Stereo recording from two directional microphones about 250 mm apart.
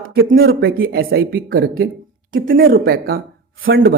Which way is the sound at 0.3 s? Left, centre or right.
Right.